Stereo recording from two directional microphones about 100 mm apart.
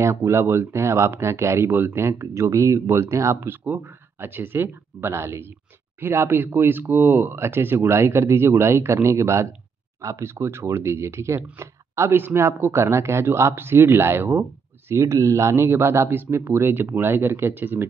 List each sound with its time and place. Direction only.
0.0 s speech: 25° right (ahead or behind)